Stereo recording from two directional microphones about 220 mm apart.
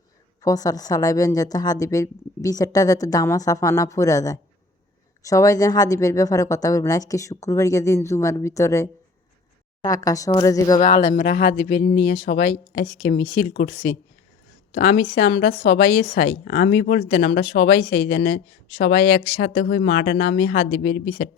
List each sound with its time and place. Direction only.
0.4 s a woman's voice: 15° left (ahead or behind)
11.3 s a woman's voice: 45° left (ahead or behind)
20.7 s speech: 55° left (ahead or behind)